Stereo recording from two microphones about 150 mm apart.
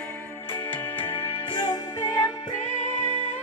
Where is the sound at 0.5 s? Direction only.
35° left (ahead or behind).